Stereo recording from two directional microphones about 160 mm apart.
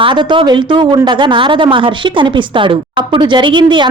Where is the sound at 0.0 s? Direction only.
30° right (ahead or behind).